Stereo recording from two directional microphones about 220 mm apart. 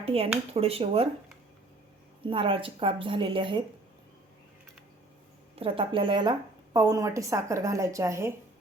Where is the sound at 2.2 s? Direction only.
25° right (ahead or behind).